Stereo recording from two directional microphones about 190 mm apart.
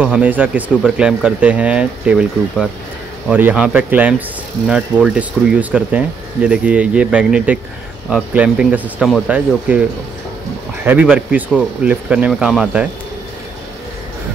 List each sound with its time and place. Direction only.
0.0 s speech: 10° right (ahead or behind)